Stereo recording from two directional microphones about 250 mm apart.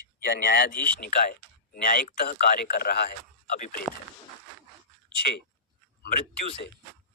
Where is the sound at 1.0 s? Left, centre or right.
Left.